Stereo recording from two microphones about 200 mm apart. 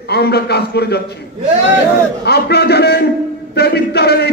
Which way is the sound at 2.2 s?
55° left (ahead or behind).